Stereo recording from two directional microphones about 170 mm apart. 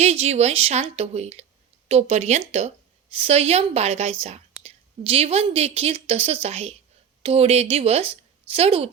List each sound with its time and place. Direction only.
0.0 s a woman's voice: 40° right (ahead or behind)